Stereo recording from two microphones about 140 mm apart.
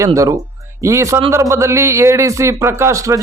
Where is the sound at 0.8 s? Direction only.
20° right (ahead or behind).